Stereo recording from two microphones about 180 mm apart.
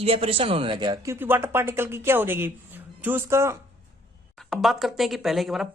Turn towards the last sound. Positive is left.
turn(degrees=0)  # may be behind; listen again after turning